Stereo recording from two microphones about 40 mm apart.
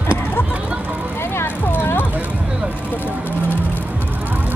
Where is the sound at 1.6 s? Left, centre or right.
Left.